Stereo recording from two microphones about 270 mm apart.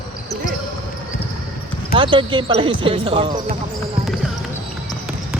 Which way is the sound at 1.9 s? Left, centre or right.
Centre.